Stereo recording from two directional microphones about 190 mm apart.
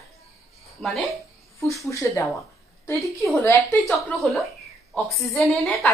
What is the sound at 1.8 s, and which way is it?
Speech, 15° left (ahead or behind).